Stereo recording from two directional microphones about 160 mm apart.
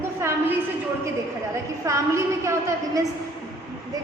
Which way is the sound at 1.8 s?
20° right (ahead or behind).